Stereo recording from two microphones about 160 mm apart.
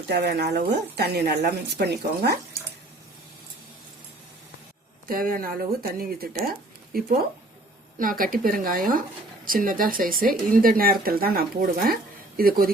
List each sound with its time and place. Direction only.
0.1 s speech: 90° right
5.0 s speech: 60° right (ahead or behind)